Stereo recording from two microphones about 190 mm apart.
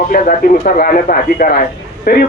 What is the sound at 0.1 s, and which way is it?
Speech, 45° left (ahead or behind).